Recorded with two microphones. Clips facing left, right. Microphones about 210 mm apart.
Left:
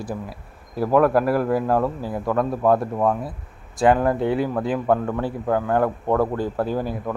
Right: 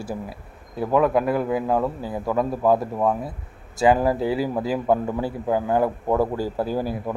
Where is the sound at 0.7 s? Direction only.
Centre (ahead or behind).